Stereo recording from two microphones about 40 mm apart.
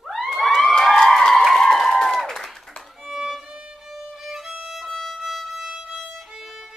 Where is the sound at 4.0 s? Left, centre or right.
Centre.